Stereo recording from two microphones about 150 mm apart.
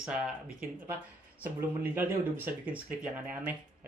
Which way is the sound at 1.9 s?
15° right (ahead or behind).